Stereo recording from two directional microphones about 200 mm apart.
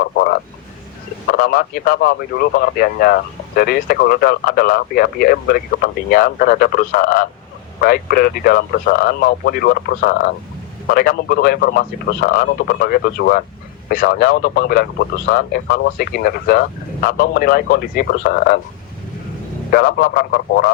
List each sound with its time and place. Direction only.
0.0 s speech: 50° left (ahead or behind)
19.7 s speech: 50° left (ahead or behind)